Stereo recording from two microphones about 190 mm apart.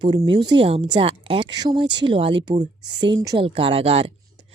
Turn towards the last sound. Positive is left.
turn(degrees=-30)  # may be behind; listen again after turning